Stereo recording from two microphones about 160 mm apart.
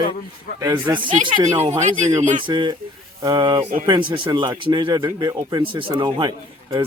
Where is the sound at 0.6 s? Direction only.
20° right (ahead or behind).